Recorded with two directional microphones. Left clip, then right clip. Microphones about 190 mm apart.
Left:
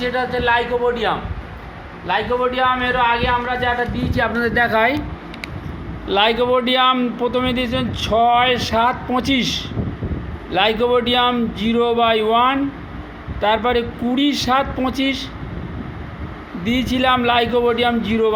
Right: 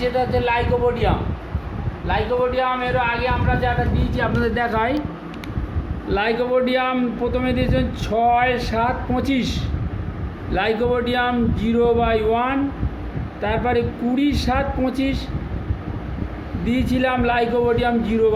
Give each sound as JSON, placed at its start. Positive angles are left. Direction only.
{"t": 0.0, "sound": "a man's voice", "side_deg": 0}
{"t": 6.1, "sound": "a man's voice", "side_deg": 15}
{"t": 14.2, "sound": "a man's voice", "side_deg": 15}
{"t": 16.6, "sound": "a man's voice", "side_deg": 15}